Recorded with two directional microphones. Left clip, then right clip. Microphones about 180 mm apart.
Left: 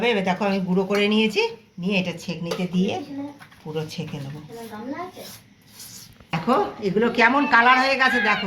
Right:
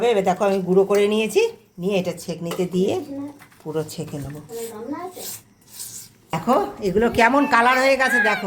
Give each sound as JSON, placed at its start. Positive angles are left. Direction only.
{"t": 0.0, "sound": "speech", "side_deg": -60}
{"t": 4.0, "sound": "speech", "side_deg": -55}
{"t": 6.3, "sound": "a woman's voice", "side_deg": -80}